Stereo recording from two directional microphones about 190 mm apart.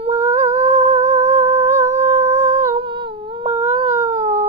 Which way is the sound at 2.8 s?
25° right (ahead or behind).